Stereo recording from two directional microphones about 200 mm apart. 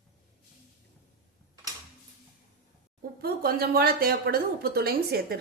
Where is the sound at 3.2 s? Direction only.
50° right (ahead or behind).